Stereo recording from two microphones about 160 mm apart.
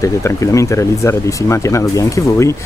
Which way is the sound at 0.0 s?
20° left (ahead or behind).